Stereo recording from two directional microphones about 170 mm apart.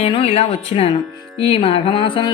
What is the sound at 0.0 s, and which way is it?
Speech, 35° left (ahead or behind).